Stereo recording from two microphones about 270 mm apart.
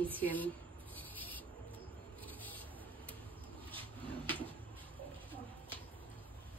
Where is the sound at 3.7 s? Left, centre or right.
Centre.